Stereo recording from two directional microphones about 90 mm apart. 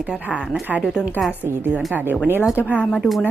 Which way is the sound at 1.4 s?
25° right (ahead or behind).